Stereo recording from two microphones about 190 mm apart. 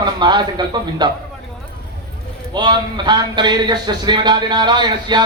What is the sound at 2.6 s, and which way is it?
Speech, 25° right (ahead or behind).